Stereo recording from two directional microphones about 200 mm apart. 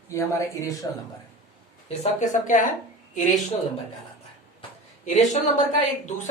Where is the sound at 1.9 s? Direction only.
40° left (ahead or behind).